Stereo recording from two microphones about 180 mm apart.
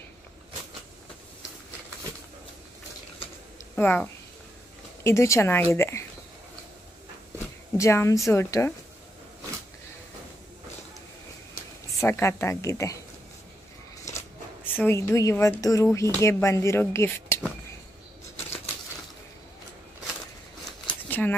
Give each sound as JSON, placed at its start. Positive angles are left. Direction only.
{"t": 3.7, "sound": "a woman's voice", "side_deg": 10}
{"t": 7.7, "sound": "a woman's voice", "side_deg": 15}
{"t": 12.0, "sound": "a woman's voice", "side_deg": 15}
{"t": 14.1, "sound": "speech", "side_deg": 10}
{"t": 20.8, "sound": "a sound", "side_deg": 10}